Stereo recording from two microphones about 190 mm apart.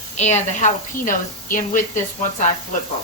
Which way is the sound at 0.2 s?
35° left (ahead or behind).